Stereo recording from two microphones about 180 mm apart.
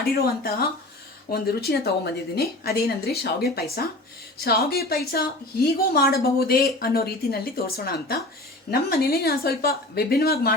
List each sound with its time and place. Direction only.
0.0 s speech: 55° left (ahead or behind)